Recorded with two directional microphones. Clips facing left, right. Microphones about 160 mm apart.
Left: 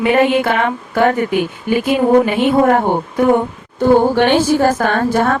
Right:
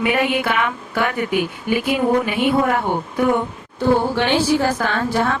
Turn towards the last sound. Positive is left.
turn(degrees=50)  # may be behind; listen again after turning